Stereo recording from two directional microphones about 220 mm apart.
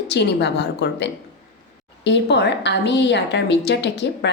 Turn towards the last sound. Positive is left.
turn(degrees=50)  # may be behind; listen again after turning